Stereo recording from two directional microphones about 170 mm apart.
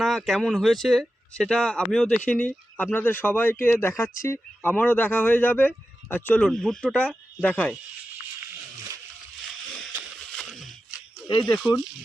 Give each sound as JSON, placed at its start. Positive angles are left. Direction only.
{"t": 0.0, "sound": "speech", "side_deg": 0}
{"t": 8.4, "sound": "wild animals", "side_deg": -20}
{"t": 10.3, "sound": "a sound", "side_deg": 0}